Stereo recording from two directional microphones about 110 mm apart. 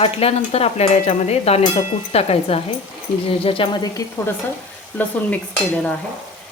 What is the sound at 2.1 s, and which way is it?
Speech, 65° left (ahead or behind).